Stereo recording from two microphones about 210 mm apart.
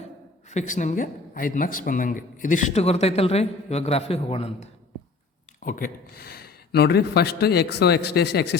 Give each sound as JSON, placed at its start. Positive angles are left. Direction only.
{"t": 0.5, "sound": "a man's voice", "side_deg": 35}
{"t": 5.6, "sound": "speech", "side_deg": 40}